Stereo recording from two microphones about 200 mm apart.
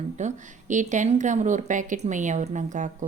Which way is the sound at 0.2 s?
35° right (ahead or behind).